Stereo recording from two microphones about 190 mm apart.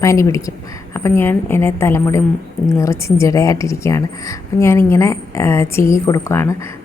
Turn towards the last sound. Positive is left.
turn(degrees=15)  # may be behind; listen again after turning